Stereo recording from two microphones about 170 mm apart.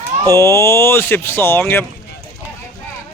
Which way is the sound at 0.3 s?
15° left (ahead or behind).